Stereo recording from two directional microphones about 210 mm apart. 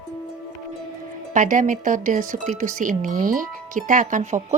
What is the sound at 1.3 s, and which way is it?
Speech, 40° right (ahead or behind).